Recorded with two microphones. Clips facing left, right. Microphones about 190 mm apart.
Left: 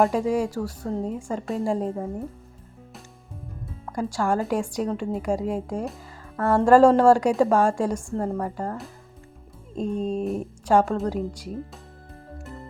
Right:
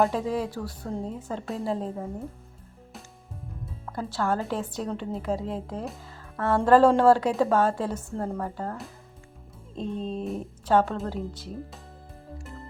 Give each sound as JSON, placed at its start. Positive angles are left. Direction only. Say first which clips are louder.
{"t": 0.0, "sound": "speech", "louder": "left 4 dB", "side_deg": 5}
{"t": 3.9, "sound": "speech", "louder": "left 3 dB", "side_deg": 10}
{"t": 7.5, "sound": "speech", "louder": "left 3 dB", "side_deg": 10}
{"t": 7.9, "sound": "speech", "louder": "left 4 dB", "side_deg": -5}
{"t": 9.7, "sound": "music", "louder": "left 5 dB", "side_deg": 45}
{"t": 10.2, "sound": "speech", "louder": "left 5 dB", "side_deg": 0}